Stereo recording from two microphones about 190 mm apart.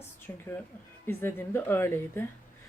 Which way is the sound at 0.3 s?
10° left (ahead or behind).